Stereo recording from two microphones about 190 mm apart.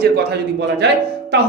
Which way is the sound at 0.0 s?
60° right (ahead or behind).